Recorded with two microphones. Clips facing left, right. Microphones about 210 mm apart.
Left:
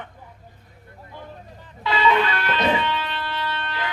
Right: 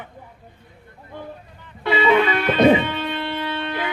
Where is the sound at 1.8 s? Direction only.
55° right (ahead or behind).